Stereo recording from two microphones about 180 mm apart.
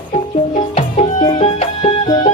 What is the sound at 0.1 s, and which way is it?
Music, 40° left (ahead or behind).